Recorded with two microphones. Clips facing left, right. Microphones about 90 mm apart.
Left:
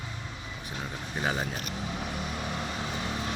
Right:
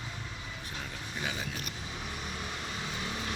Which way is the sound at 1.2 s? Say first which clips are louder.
Left 7 dB; 45° left (ahead or behind).